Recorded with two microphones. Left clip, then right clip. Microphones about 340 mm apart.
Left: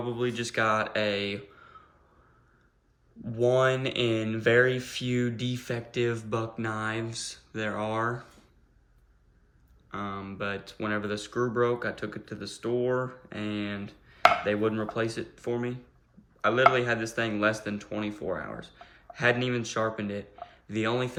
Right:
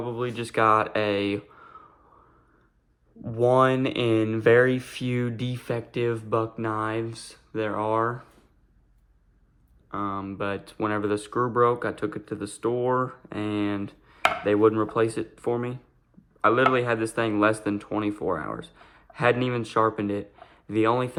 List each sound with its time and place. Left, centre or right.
0.0 s speech: centre
3.2 s speech: centre
9.9 s speech: centre